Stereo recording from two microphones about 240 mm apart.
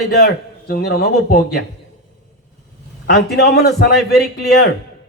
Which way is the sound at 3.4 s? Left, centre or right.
Left.